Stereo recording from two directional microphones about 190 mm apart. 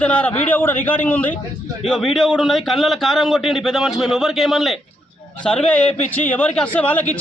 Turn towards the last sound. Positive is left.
turn(degrees=10)  # may be behind; listen again after turning